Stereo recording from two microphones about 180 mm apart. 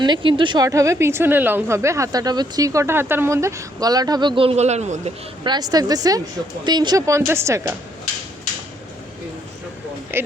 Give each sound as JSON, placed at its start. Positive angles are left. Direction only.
{"t": 0.0, "sound": "a woman's voice", "side_deg": -25}
{"t": 5.4, "sound": "a woman's voice", "side_deg": -25}
{"t": 10.1, "sound": "a woman's voice", "side_deg": -10}